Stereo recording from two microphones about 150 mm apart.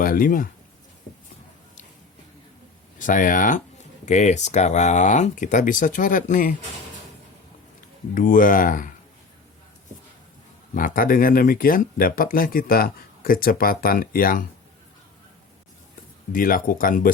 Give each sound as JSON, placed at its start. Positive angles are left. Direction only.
{"t": 0.0, "sound": "speech", "side_deg": 70}
{"t": 3.0, "sound": "speech", "side_deg": 60}
{"t": 8.1, "sound": "speech", "side_deg": 65}
{"t": 10.8, "sound": "speech", "side_deg": 65}
{"t": 16.3, "sound": "speech", "side_deg": 70}